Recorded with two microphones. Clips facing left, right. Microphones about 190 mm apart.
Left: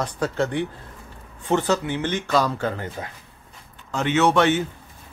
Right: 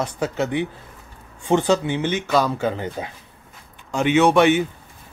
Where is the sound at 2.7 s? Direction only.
20° right (ahead or behind).